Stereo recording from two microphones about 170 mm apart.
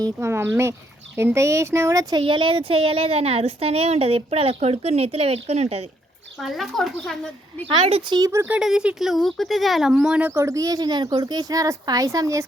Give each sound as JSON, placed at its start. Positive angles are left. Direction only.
{"t": 0.0, "sound": "speech", "side_deg": -15}
{"t": 6.4, "sound": "speech", "side_deg": 0}
{"t": 7.8, "sound": "speech", "side_deg": -35}